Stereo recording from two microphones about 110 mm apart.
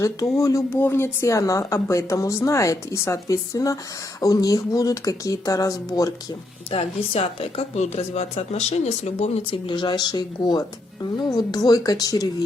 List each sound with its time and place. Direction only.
0.0 s speech: 30° left (ahead or behind)
6.7 s speech: 60° left (ahead or behind)
9.6 s speech: 45° left (ahead or behind)